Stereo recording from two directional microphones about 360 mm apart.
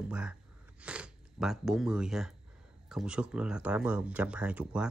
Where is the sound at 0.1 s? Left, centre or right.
Centre.